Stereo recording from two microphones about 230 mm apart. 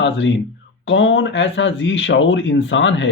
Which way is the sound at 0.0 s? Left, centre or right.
Left.